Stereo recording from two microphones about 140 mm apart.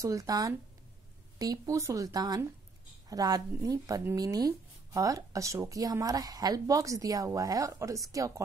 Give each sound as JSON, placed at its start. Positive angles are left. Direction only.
{"t": 0.0, "sound": "speech", "side_deg": -25}